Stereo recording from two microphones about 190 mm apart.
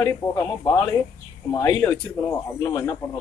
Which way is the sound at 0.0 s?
15° left (ahead or behind).